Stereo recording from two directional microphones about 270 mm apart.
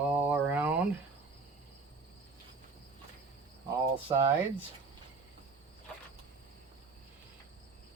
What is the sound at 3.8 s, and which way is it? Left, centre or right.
Speech, centre.